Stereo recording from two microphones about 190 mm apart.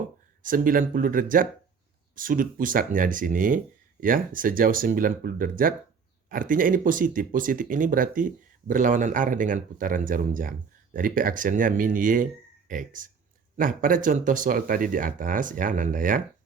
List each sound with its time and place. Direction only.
0.4 s speech: 45° right (ahead or behind)